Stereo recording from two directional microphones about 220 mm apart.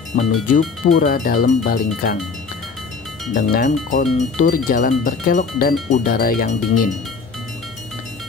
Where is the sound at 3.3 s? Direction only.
40° left (ahead or behind).